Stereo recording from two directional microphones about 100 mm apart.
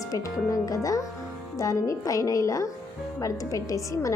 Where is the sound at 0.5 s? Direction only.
35° left (ahead or behind).